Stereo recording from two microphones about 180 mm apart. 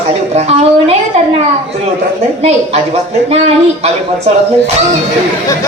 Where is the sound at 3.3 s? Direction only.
35° right (ahead or behind).